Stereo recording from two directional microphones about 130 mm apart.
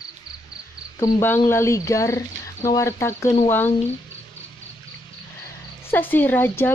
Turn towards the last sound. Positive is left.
turn(degrees=15)  # may be behind; listen again after turning